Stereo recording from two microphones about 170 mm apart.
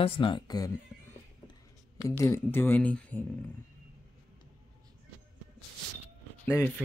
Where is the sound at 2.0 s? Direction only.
20° left (ahead or behind).